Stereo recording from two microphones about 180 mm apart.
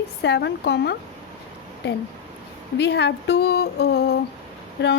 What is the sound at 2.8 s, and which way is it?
Speech, 70° left (ahead or behind).